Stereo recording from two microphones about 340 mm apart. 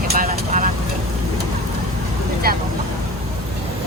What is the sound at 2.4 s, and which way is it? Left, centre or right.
Speech, right.